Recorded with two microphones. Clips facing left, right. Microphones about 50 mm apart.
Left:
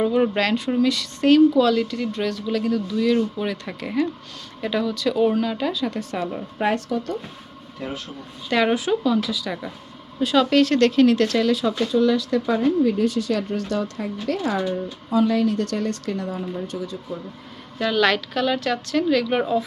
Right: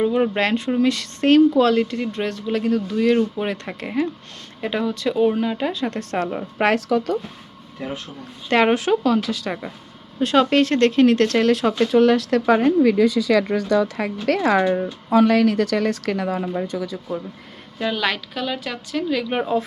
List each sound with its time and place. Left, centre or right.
0.0 s speech: centre
0.3 s speech: right
3.8 s speech: centre
5.9 s a woman's voice: right
6.6 s speech: right
7.8 s speech: centre
8.4 s a woman's voice: right
10.4 s speech: right
11.1 s a woman's voice: right
11.9 s speech: right
13.3 s speech: right
15.1 s speech: right
17.7 s a woman's voice: centre